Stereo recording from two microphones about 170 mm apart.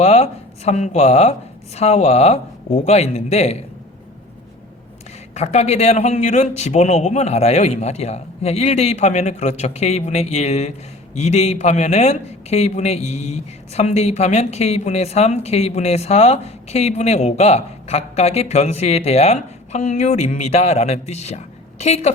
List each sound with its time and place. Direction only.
0.0 s a man's voice: 40° left (ahead or behind)
5.3 s a man's voice: 40° left (ahead or behind)